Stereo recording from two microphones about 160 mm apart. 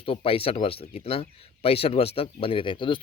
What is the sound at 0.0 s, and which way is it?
Speech, 35° left (ahead or behind).